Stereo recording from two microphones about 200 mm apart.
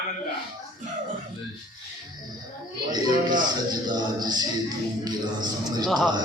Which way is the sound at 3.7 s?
20° right (ahead or behind).